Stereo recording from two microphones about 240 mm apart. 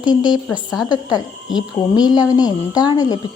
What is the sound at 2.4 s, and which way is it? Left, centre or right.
Speech, centre.